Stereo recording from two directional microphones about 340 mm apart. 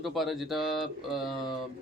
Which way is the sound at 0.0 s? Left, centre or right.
Centre.